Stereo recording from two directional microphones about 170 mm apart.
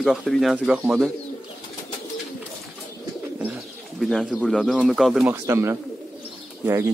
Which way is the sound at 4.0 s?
Centre (ahead or behind).